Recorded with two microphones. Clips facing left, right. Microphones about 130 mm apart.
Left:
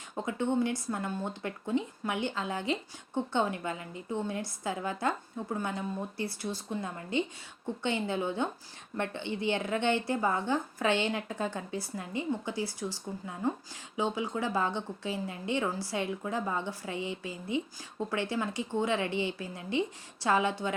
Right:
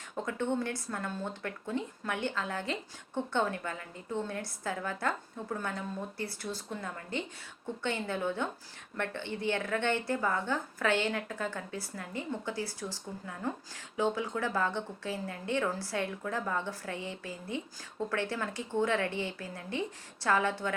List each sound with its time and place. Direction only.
0.2 s a woman's voice: 15° left (ahead or behind)